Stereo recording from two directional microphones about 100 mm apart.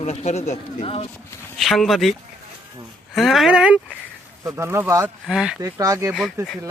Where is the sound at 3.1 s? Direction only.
Centre (ahead or behind).